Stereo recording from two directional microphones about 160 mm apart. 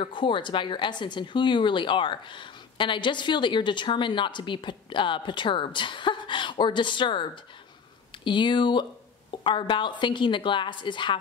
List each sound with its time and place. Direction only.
0.0 s speech: 30° left (ahead or behind)